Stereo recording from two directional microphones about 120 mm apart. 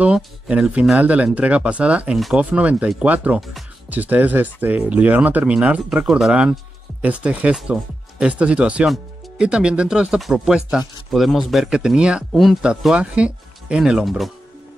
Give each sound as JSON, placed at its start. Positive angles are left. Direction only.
{"t": 0.0, "sound": "speech", "side_deg": -10}
{"t": 2.1, "sound": "speech", "side_deg": 0}
{"t": 2.5, "sound": "speech", "side_deg": -10}